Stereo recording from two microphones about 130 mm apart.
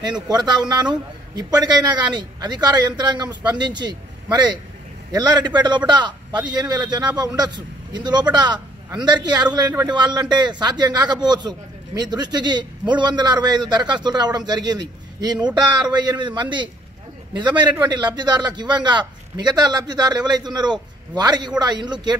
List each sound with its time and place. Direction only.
0.0 s a man's voice: 35° right (ahead or behind)